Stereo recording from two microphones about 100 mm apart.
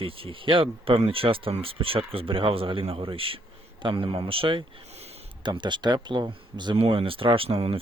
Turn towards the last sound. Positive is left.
turn(degrees=-70)  # may be behind; listen again after turning